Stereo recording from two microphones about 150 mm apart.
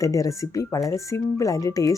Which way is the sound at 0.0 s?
20° left (ahead or behind).